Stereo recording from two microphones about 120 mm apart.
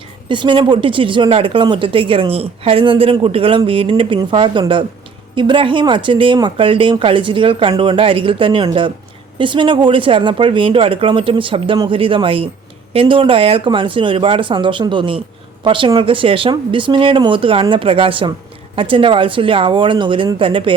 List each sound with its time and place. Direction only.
0.3 s speech: 40° right (ahead or behind)